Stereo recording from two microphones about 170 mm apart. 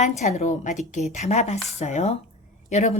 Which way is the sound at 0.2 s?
40° left (ahead or behind).